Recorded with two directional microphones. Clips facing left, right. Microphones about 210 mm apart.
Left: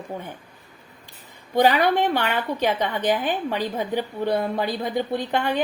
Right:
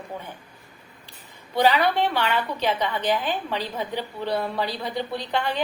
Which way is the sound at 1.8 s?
50° left (ahead or behind).